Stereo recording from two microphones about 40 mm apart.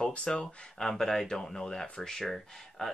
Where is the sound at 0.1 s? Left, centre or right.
Left.